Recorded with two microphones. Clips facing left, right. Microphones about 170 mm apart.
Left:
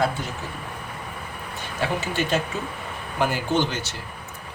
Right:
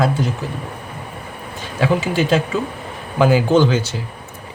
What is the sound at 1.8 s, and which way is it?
Speech, 90° right.